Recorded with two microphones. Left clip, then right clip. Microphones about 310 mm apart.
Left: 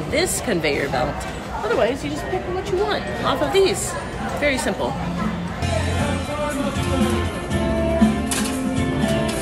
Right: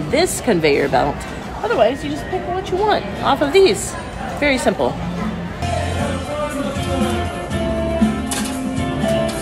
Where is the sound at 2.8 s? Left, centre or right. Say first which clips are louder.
Right 8 dB; centre.